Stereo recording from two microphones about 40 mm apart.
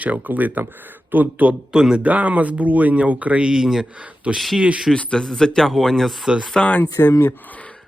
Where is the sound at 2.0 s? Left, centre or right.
Right.